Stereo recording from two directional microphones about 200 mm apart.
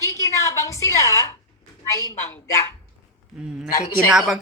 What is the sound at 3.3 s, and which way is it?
Speech, 5° right (ahead or behind).